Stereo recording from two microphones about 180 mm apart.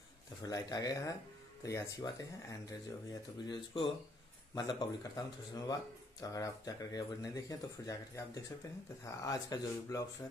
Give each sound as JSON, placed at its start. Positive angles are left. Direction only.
{"t": 0.4, "sound": "speech", "side_deg": 20}